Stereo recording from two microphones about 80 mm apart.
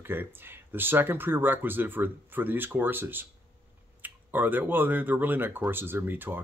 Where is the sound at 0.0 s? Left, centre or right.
Right.